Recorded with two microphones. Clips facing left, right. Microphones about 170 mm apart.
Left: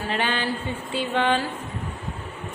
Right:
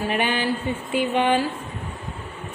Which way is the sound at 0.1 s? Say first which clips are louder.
Right 1 dB; 15° right (ahead or behind).